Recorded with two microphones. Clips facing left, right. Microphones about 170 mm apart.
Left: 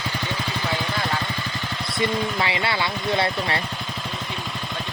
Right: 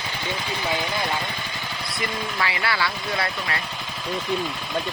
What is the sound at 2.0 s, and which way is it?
Speech, 25° left (ahead or behind).